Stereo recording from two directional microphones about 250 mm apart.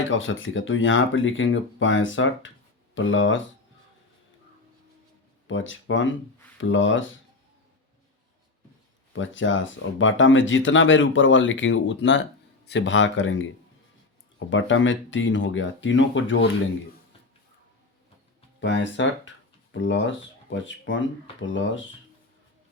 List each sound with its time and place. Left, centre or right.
0.1 s speech: left
5.5 s speech: left
9.1 s speech: left
18.6 s speech: left